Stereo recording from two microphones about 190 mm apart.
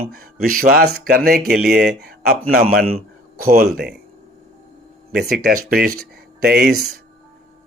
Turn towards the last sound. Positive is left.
turn(degrees=-60)  # may be behind; listen again after turning